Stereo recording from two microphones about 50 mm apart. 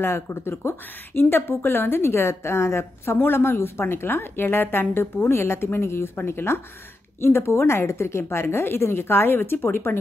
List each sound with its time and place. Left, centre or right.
0.0 s speech: left
3.2 s a woman's voice: left